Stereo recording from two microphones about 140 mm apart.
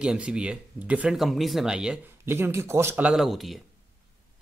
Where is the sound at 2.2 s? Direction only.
15° right (ahead or behind); by 3.6 s centre (ahead or behind).